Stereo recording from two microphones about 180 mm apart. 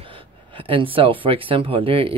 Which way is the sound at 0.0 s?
30° right (ahead or behind).